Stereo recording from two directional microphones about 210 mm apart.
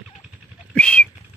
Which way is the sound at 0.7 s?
5° left (ahead or behind).